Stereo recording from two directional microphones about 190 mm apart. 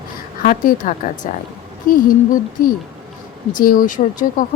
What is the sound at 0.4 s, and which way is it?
Speech, 45° left (ahead or behind).